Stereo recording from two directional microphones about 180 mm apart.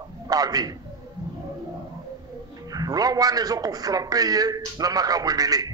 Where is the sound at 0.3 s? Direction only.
20° right (ahead or behind).